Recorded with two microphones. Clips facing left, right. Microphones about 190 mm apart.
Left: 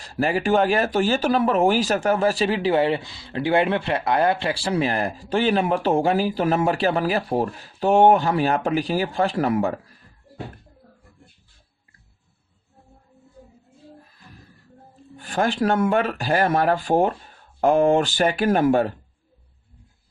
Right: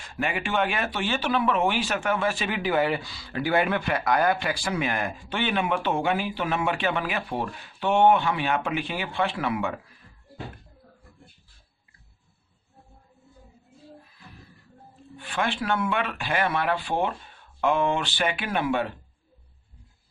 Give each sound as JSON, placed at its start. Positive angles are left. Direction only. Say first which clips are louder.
{"t": 0.0, "sound": "speech", "louder": "left 7 dB", "side_deg": 35}
{"t": 15.1, "sound": "speech", "louder": "left 6 dB", "side_deg": 40}